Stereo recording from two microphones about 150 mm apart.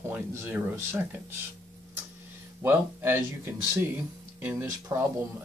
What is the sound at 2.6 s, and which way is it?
Speech, 15° right (ahead or behind).